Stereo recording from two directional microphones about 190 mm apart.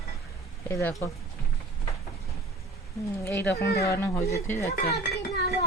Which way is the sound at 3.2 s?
10° left (ahead or behind).